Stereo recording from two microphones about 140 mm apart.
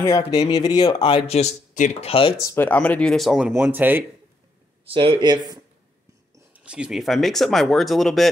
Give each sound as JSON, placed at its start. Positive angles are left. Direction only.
{"t": 0.3, "sound": "speech", "side_deg": 30}
{"t": 2.0, "sound": "speech", "side_deg": 40}
{"t": 2.5, "sound": "speech", "side_deg": 10}
{"t": 3.5, "sound": "speech", "side_deg": -15}
{"t": 4.8, "sound": "speech", "side_deg": -40}
{"t": 6.5, "sound": "speech", "side_deg": -10}